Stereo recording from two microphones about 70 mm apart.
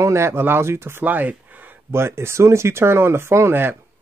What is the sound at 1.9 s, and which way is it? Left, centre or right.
Speech, right.